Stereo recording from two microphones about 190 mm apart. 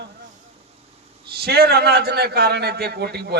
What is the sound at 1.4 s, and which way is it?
A man's voice, 55° right (ahead or behind).